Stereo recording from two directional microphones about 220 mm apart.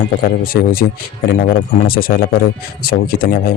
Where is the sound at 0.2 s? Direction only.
40° left (ahead or behind).